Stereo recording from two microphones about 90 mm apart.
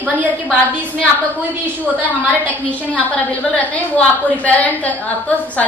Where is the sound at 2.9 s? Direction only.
15° left (ahead or behind).